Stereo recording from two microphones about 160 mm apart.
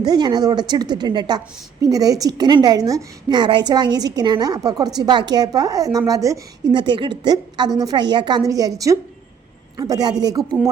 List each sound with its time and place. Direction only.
0.0 s a woman's voice: 25° right (ahead or behind)